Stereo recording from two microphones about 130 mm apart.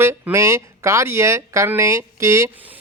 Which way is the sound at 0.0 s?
20° right (ahead or behind).